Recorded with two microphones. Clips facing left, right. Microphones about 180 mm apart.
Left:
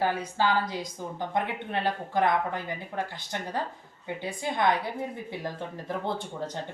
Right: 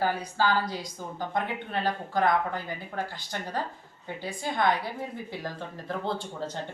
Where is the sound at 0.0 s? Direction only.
25° left (ahead or behind).